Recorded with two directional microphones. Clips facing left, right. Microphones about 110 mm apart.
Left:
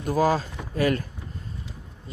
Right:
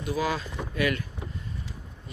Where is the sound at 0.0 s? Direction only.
40° left (ahead or behind).